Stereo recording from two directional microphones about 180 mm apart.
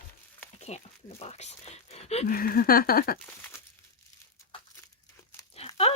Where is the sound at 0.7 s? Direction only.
40° left (ahead or behind).